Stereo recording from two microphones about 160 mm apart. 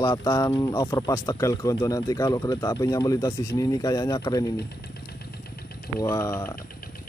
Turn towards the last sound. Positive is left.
turn(degrees=15)  # may be behind; listen again after turning